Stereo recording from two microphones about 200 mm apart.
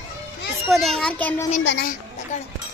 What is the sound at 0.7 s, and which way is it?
Speech, centre (ahead or behind).